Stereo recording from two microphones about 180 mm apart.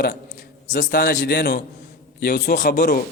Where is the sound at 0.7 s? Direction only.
55° left (ahead or behind).